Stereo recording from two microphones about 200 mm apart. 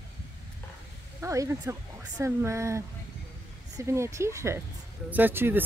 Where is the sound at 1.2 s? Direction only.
15° right (ahead or behind).